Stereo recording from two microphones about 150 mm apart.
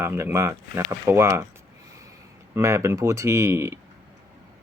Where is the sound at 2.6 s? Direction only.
20° right (ahead or behind).